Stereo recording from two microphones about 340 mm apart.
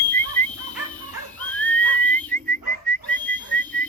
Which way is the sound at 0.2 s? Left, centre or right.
Centre.